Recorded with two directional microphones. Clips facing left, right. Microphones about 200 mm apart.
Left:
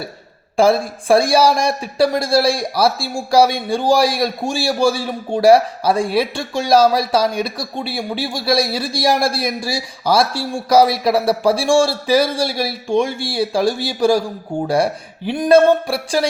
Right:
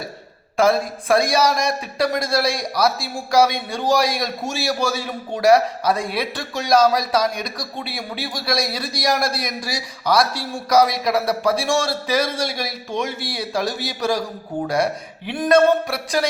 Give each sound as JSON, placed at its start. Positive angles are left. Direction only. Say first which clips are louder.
{"t": 0.5, "sound": "speech", "louder": "left 3 dB", "side_deg": 30}
{"t": 15.3, "sound": "speech", "louder": "left 4 dB", "side_deg": 30}